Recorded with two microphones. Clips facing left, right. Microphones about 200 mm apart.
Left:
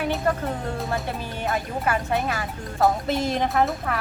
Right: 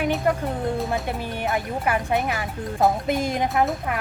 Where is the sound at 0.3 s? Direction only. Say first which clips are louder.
Right 2 dB; 15° right (ahead or behind).